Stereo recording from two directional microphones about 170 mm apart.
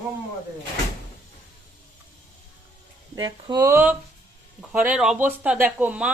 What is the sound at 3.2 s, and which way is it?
Speech, 25° right (ahead or behind).